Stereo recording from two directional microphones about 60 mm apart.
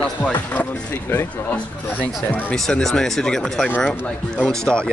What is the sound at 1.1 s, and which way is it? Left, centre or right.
Speech, left.